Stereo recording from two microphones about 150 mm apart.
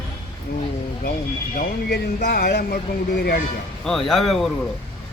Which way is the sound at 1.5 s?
90° left.